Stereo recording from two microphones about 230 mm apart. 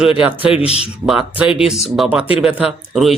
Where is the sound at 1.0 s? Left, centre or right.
Centre.